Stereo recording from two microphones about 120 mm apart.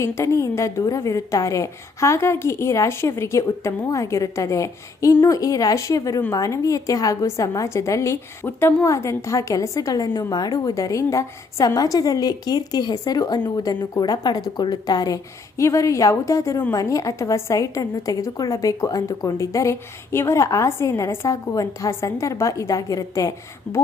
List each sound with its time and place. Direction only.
0.0 s a woman's voice: 25° left (ahead or behind)
23.7 s speech: 5° left (ahead or behind)